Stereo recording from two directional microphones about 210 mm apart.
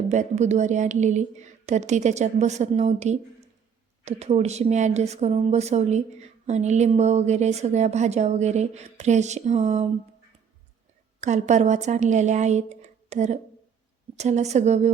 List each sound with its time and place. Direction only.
0.1 s speech: 35° right (ahead or behind)
11.2 s speech: 35° right (ahead or behind)